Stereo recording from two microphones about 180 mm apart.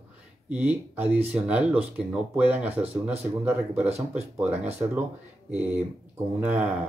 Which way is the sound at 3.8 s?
35° right (ahead or behind).